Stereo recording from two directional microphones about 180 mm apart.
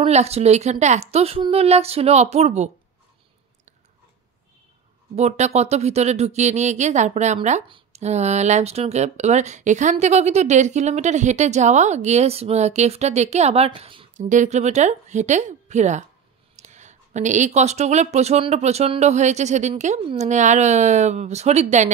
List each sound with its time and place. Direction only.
0.0 s speech: 35° right (ahead or behind)
5.1 s speech: 40° right (ahead or behind)
14.1 s speech: 45° right (ahead or behind)